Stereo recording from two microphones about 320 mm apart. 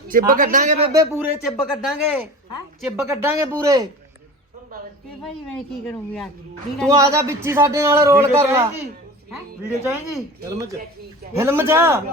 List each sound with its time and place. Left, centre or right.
0.1 s a man's voice: right
0.9 s a man's voice: centre
5.2 s speech: centre
6.8 s a man's voice: centre
9.8 s a man's voice: centre